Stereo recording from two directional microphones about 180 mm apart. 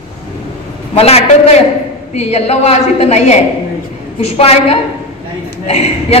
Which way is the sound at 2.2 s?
35° left (ahead or behind).